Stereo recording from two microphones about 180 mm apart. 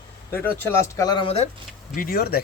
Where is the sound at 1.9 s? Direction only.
50° left (ahead or behind).